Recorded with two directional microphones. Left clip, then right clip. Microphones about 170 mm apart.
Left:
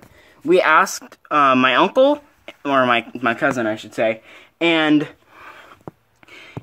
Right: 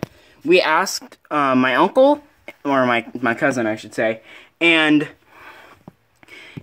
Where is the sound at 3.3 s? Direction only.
35° right (ahead or behind).